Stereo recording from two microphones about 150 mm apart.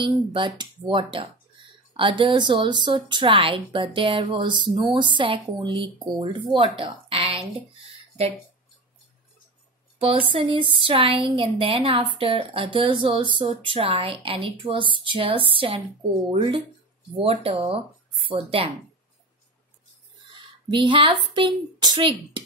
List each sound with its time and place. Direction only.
0.0 s a woman's voice: 35° right (ahead or behind)
9.9 s a woman's voice: 35° right (ahead or behind)
20.7 s a woman's voice: 35° right (ahead or behind)